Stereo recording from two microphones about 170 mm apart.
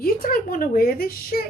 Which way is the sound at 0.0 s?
60° left (ahead or behind).